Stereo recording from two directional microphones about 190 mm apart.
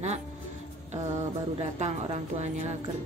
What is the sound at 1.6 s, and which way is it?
Speech, 35° right (ahead or behind).